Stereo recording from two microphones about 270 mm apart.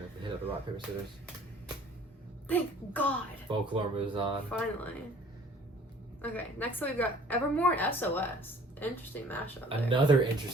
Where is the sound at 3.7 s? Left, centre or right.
Centre.